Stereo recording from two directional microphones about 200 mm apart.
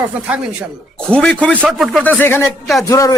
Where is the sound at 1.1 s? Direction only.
5° left (ahead or behind).